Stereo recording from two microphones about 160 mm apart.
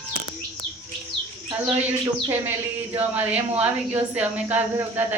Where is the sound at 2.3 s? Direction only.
15° right (ahead or behind).